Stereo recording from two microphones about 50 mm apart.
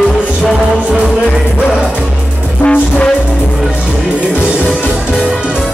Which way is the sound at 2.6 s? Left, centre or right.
Left.